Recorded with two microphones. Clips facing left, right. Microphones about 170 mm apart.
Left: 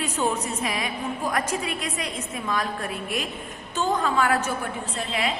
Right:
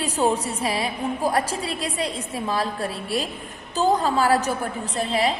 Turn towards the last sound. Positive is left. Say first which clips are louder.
# right 5 dB
turn(degrees=-35)  # may be behind; listen again after turning